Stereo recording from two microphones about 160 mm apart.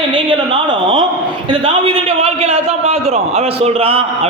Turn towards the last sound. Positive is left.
turn(degrees=-40)  # may be behind; listen again after turning